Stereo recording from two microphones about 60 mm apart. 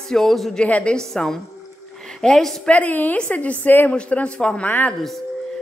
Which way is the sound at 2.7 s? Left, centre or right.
Left.